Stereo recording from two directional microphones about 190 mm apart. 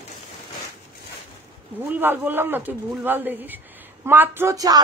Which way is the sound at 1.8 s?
10° right (ahead or behind).